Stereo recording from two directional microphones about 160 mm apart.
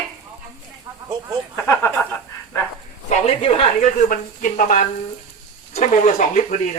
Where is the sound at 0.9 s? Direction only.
20° right (ahead or behind).